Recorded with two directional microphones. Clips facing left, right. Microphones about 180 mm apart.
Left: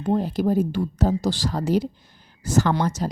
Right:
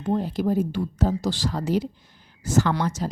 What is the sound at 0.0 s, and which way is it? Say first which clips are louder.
Speech: left 2 dB; 40° left (ahead or behind).